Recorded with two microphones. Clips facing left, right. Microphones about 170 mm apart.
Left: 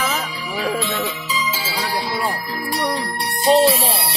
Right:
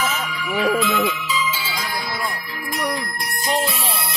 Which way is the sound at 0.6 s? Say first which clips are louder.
Right 3 dB; 35° left (ahead or behind).